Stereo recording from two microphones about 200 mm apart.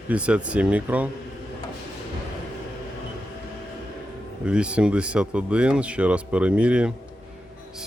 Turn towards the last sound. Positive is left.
turn(degrees=-5)  # may be behind; listen again after turning